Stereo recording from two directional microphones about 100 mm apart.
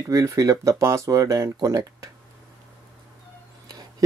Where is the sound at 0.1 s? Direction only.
35° right (ahead or behind).